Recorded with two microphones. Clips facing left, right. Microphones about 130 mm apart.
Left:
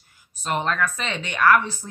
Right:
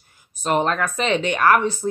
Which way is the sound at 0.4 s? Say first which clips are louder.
Right 4 dB; 35° right (ahead or behind).